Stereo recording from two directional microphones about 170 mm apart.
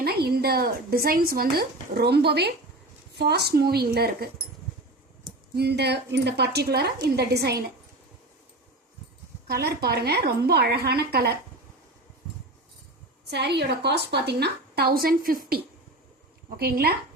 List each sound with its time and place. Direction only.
0.0 s a woman's voice: 65° right (ahead or behind)
5.5 s a woman's voice: 75° right (ahead or behind)
9.5 s a woman's voice: 70° right (ahead or behind)
13.3 s a woman's voice: 80° right; by 16.9 s 65° right (ahead or behind)